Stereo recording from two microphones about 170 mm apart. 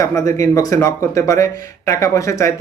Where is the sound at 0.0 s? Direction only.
20° left (ahead or behind).